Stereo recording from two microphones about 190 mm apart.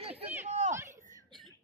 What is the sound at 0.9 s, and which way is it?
Chuckle, 40° right (ahead or behind).